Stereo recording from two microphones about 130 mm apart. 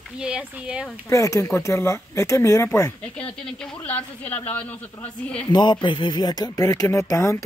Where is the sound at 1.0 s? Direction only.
25° left (ahead or behind).